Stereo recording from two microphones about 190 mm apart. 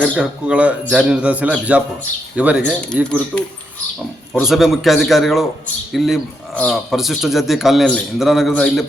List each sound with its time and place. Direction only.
0.2 s a man's voice: 5° right (ahead or behind)
2.6 s speech: 5° left (ahead or behind)
4.4 s speech: centre (ahead or behind)